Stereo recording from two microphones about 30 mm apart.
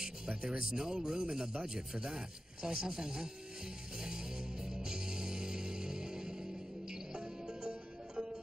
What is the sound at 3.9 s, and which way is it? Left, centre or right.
Music, right.